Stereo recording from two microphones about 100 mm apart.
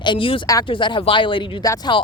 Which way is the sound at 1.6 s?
35° left (ahead or behind).